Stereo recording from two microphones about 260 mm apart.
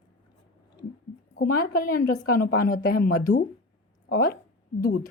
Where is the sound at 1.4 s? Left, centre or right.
Left.